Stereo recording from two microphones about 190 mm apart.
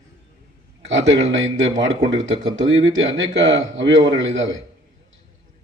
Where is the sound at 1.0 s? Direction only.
85° right.